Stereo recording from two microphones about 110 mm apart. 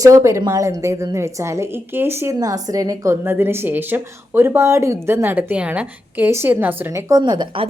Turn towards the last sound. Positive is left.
turn(degrees=-50)  # may be behind; listen again after turning